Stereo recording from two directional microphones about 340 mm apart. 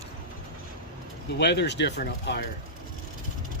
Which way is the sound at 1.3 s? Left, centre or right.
Left.